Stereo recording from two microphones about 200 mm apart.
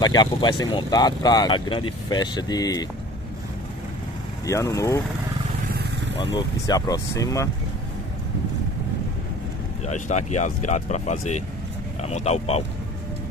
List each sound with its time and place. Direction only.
0.0 s speech: 20° left (ahead or behind)
4.5 s speech: 15° left (ahead or behind)
6.3 s speech: 20° left (ahead or behind)
9.8 s speech: 35° left (ahead or behind)